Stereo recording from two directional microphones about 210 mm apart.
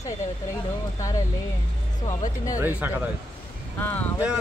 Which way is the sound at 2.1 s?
15° left (ahead or behind).